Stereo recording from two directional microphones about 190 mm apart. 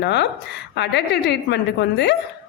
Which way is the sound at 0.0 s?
65° left (ahead or behind).